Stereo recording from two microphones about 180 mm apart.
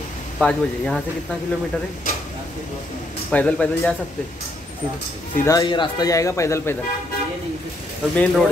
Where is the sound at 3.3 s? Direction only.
5° left (ahead or behind).